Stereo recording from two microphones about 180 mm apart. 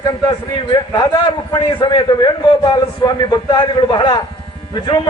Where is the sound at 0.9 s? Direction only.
25° left (ahead or behind).